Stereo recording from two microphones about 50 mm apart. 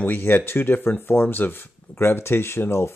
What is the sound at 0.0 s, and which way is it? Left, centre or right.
Speech, left.